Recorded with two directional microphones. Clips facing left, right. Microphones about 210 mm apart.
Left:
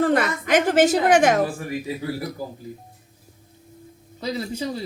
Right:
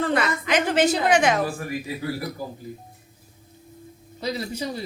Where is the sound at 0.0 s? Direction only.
45° left (ahead or behind).